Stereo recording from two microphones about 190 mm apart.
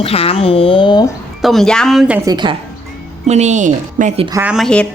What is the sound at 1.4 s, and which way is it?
Speech, centre (ahead or behind).